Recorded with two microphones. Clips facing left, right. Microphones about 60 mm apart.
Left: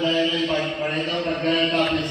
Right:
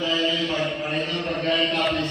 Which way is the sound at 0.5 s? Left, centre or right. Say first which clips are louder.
Left 2 dB; centre.